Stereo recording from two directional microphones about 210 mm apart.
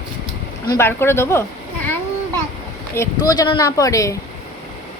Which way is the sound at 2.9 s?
15° left (ahead or behind).